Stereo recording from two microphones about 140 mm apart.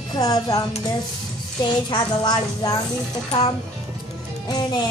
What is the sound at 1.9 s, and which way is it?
Speech, 30° left (ahead or behind).